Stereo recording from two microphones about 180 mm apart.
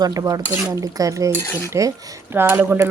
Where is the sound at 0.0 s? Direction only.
20° right (ahead or behind).